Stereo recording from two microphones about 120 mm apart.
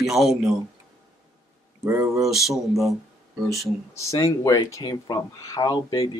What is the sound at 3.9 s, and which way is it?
Speech, 25° left (ahead or behind).